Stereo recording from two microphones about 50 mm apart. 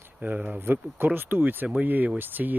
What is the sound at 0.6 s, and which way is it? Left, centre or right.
Speech, right.